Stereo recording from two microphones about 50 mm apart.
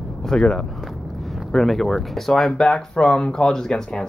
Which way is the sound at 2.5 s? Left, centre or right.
Centre.